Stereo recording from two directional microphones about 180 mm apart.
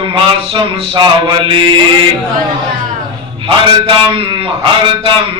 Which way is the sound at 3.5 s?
30° right (ahead or behind).